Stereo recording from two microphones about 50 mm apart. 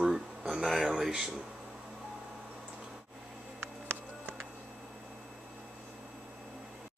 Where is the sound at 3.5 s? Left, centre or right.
Right.